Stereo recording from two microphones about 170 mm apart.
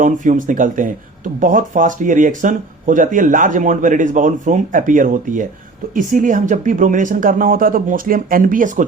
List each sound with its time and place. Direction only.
0.0 s speech: 50° right (ahead or behind)